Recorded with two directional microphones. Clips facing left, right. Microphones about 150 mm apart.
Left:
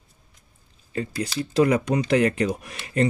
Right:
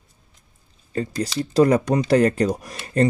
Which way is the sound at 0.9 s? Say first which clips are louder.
Right 3 dB; 40° right (ahead or behind).